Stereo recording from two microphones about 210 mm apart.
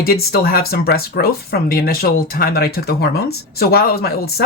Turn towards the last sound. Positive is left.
turn(degrees=45)  # may be behind; listen again after turning